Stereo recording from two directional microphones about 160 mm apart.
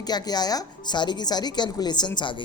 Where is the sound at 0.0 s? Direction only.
25° left (ahead or behind).